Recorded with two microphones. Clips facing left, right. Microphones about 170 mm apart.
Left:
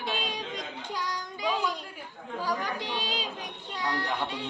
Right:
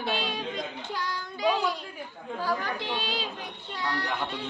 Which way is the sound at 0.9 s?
15° left (ahead or behind).